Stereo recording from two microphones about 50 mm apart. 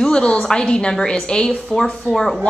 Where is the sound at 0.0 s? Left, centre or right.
Centre.